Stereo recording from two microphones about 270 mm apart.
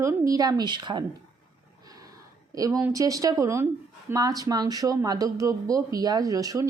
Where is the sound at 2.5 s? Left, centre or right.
Centre.